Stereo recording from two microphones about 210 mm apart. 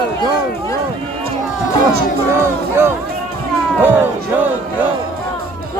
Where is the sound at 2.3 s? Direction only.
10° right (ahead or behind).